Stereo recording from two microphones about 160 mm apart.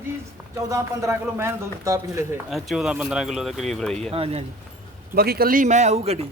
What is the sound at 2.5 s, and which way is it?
Speech, centre (ahead or behind).